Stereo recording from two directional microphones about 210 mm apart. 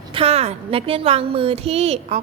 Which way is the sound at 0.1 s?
25° right (ahead or behind).